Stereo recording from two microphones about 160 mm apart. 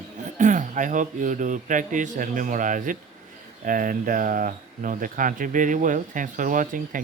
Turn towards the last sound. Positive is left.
turn(degrees=-55)  # may be behind; listen again after turning